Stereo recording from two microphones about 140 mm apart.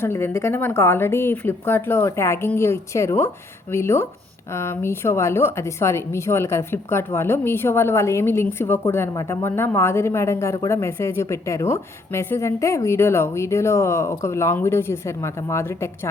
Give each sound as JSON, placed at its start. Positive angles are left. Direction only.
{"t": 0.0, "sound": "a woman's voice", "side_deg": 15}